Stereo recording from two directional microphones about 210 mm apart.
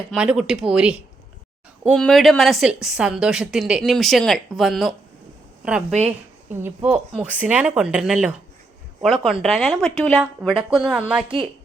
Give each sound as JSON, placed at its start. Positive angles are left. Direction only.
{"t": 0.1, "sound": "a woman's voice", "side_deg": -5}
{"t": 5.9, "sound": "a woman's voice", "side_deg": -30}
{"t": 6.5, "sound": "a woman's voice", "side_deg": -10}